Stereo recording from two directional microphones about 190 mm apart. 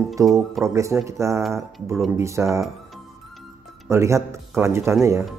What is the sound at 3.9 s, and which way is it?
Speech, 15° right (ahead or behind).